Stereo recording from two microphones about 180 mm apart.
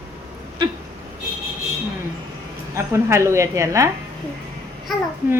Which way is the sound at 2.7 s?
15° right (ahead or behind).